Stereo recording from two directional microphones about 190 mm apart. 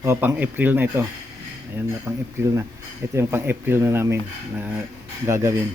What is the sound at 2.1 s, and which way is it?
Speech, 15° right (ahead or behind).